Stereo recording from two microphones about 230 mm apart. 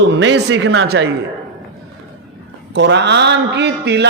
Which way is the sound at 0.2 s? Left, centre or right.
Right.